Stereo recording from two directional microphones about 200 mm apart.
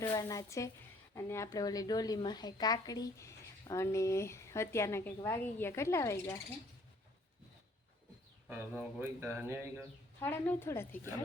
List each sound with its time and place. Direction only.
0.1 s a woman's voice: 15° left (ahead or behind)
9.0 s speech: 10° right (ahead or behind)
10.2 s a woman's voice: 10° left (ahead or behind)